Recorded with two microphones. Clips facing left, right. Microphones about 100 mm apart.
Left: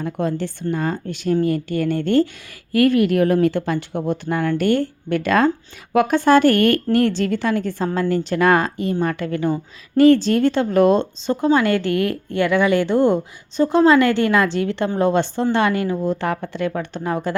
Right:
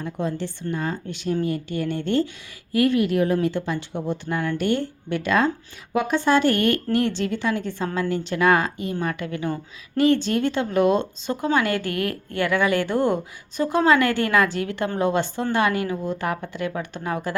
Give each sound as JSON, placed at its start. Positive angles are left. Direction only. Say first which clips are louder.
{"t": 0.0, "sound": "a woman's voice", "louder": "left 4 dB", "side_deg": 55}